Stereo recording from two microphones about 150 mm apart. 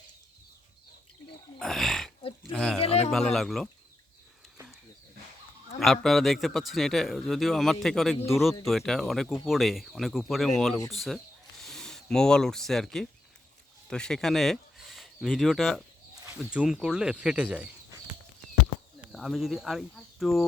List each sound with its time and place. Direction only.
1.5 s roaring cats: centre (ahead or behind)
2.5 s a man's voice: 5° left (ahead or behind)
2.8 s speech: 45° left (ahead or behind)
3.1 s a man's voice: centre (ahead or behind)
5.8 s a man's voice: centre (ahead or behind)
19.0 s speech: centre (ahead or behind)